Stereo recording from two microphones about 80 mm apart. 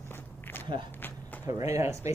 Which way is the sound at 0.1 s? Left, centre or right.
Left.